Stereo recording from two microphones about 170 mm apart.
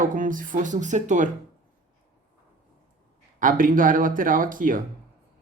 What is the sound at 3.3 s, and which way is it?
Speech, 50° right (ahead or behind).